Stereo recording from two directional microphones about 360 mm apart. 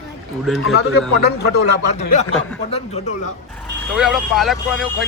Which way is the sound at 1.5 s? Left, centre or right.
Centre.